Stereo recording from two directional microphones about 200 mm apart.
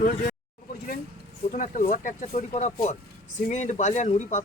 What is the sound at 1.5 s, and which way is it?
Speech, 40° left (ahead or behind).